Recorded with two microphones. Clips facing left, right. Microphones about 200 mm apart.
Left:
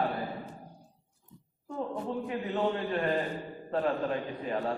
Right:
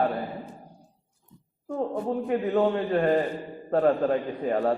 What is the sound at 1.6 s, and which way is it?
A man's voice, 50° right (ahead or behind).